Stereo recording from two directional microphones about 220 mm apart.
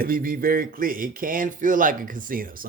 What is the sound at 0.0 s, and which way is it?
Speech, 40° right (ahead or behind).